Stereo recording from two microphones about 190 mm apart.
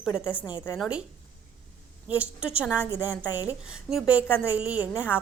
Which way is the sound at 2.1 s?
5° right (ahead or behind).